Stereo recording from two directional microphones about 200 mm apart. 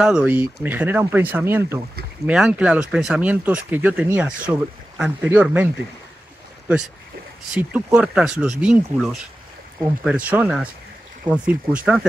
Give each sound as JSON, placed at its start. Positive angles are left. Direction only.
{"t": 0.0, "sound": "speech", "side_deg": -5}
{"t": 7.5, "sound": "speech", "side_deg": -5}